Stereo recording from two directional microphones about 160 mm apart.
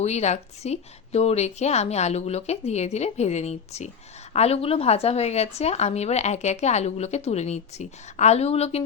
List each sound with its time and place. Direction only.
0.0 s speech: 45° left (ahead or behind)